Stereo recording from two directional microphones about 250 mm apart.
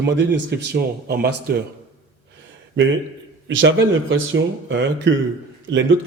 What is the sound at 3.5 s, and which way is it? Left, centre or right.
Speech, right.